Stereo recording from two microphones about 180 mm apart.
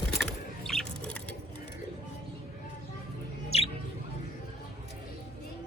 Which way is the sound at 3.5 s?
35° left (ahead or behind).